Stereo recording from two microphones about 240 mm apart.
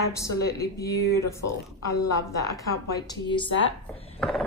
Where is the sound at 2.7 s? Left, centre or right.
Centre.